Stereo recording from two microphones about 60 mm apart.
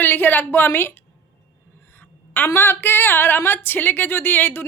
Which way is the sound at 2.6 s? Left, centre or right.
Left.